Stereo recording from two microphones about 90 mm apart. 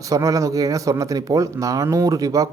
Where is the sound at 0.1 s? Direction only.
40° right (ahead or behind).